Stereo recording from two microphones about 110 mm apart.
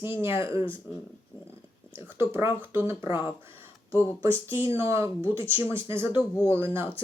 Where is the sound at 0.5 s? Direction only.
50° left (ahead or behind).